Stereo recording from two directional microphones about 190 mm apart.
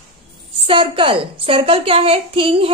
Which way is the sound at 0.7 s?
30° right (ahead or behind).